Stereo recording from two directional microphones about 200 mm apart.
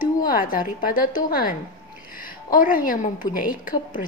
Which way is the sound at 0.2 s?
45° left (ahead or behind).